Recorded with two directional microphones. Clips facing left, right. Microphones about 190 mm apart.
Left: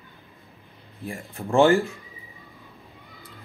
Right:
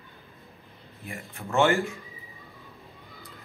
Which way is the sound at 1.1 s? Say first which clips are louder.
Left 7 dB; 35° left (ahead or behind).